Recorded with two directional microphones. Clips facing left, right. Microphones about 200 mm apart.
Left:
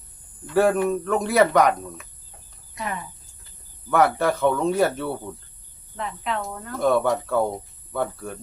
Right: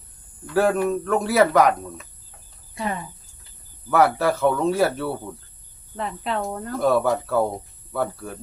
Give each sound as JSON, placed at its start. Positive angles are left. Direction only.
{"t": 0.5, "sound": "speech", "side_deg": 0}
{"t": 2.7, "sound": "speech", "side_deg": -30}
{"t": 3.8, "sound": "speech", "side_deg": -5}
{"t": 6.0, "sound": "speech", "side_deg": -35}
{"t": 6.7, "sound": "speech", "side_deg": -5}